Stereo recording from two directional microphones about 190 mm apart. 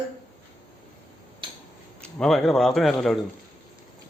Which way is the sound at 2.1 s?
Centre (ahead or behind).